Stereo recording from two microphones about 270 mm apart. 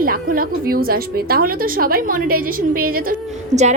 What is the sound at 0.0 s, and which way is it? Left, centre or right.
A woman's voice, right.